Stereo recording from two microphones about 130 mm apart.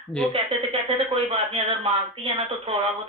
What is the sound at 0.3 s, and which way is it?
Speech, 45° right (ahead or behind).